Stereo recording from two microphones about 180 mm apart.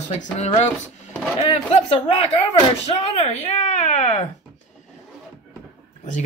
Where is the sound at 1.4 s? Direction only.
35° left (ahead or behind).